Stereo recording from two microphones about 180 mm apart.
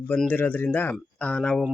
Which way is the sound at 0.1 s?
5° left (ahead or behind).